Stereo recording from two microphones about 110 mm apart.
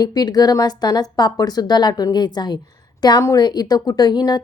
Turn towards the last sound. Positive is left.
turn(degrees=40)  # may be behind; listen again after turning